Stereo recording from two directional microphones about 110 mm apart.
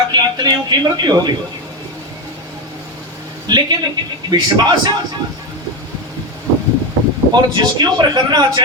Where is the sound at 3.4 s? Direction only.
40° right (ahead or behind).